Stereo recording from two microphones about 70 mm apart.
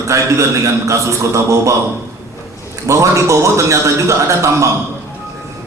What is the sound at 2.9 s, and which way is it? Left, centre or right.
A man's voice, right.